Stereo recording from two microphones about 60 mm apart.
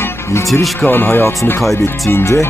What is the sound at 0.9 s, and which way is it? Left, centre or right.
Speech, left.